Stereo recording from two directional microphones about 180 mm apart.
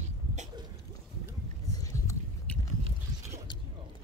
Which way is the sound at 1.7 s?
20° left (ahead or behind).